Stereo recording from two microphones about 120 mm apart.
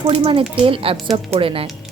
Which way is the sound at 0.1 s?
50° right (ahead or behind).